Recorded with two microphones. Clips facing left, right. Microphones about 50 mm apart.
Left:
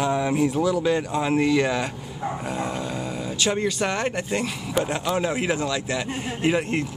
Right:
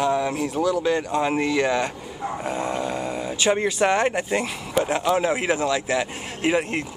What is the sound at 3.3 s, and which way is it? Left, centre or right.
Speech, centre.